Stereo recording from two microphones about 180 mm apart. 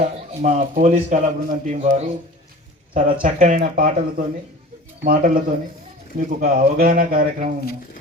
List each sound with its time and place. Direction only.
0.0 s a man's voice: 40° right (ahead or behind)
5.0 s speech: 50° right (ahead or behind)